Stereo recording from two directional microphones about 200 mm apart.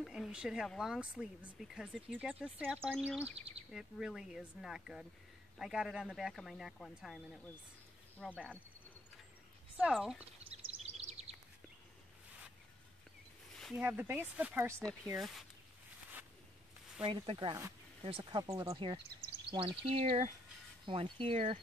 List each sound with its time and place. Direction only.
0.0 s speech: centre (ahead or behind)
3.3 s bird: 30° right (ahead or behind)
3.7 s speech: centre (ahead or behind)
8.2 s speech: centre (ahead or behind)
9.8 s speech: 5° right (ahead or behind)
10.5 s bird vocalization: 30° right (ahead or behind)
13.6 s a sound: centre (ahead or behind)
13.8 s speech: 10° right (ahead or behind)
17.0 s speech: 25° right (ahead or behind)